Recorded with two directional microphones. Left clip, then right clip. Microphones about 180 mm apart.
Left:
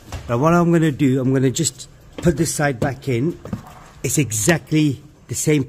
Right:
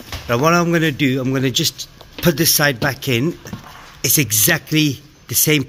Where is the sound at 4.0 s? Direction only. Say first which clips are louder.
Right 5 dB; 15° left (ahead or behind).